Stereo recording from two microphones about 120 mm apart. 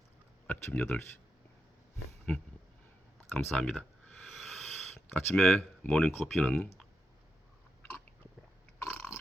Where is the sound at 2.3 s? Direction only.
10° left (ahead or behind).